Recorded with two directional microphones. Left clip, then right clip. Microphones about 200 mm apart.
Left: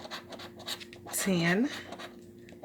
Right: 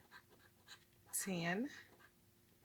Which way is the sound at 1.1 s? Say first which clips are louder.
Left 13 dB; 40° right (ahead or behind).